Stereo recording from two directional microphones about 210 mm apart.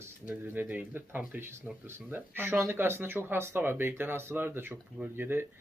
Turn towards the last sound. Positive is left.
turn(degrees=-10)  # may be behind; listen again after turning